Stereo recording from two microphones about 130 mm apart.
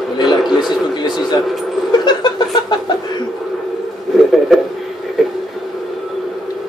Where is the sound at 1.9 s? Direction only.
35° left (ahead or behind).